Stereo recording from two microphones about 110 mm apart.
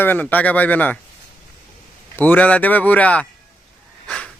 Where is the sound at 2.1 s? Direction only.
15° left (ahead or behind).